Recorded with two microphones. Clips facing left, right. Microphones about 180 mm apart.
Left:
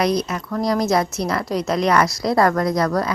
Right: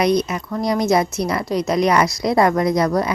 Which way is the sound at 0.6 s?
Centre (ahead or behind).